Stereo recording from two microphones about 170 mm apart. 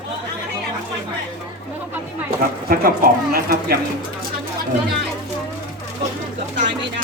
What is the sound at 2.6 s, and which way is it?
Speech, 60° right (ahead or behind).